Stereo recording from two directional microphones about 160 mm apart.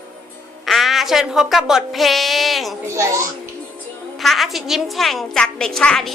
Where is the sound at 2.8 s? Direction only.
20° right (ahead or behind).